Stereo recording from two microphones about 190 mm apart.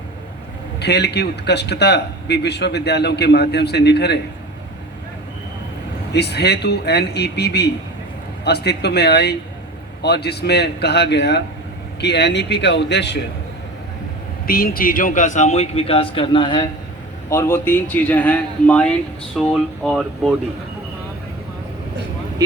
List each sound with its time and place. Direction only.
0.8 s speech: 60° left (ahead or behind)
6.1 s speech: 60° left (ahead or behind)
14.4 s a man's voice: 50° left (ahead or behind); by 20.3 s centre (ahead or behind)